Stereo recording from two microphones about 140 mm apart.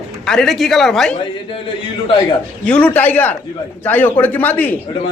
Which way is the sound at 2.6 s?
10° left (ahead or behind).